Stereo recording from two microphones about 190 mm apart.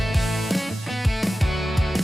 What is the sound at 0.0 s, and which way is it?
Music, centre (ahead or behind).